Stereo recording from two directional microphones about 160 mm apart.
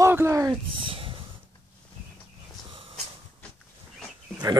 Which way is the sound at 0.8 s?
35° right (ahead or behind).